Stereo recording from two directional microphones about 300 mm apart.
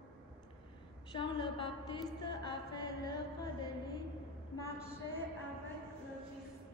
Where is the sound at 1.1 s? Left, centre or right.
Centre.